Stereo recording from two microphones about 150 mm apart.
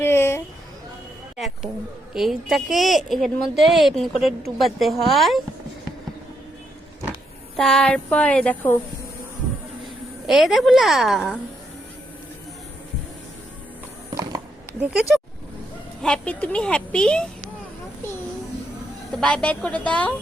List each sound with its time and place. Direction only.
0.0 s a sound: 15° left (ahead or behind)
1.4 s a sound: 5° right (ahead or behind)
2.1 s speech: centre (ahead or behind)
7.5 s speech: 5° left (ahead or behind)
10.2 s speech: centre (ahead or behind)
14.8 s speech: 5° right (ahead or behind)
16.0 s speech: 5° left (ahead or behind)
19.1 s speech: 5° left (ahead or behind)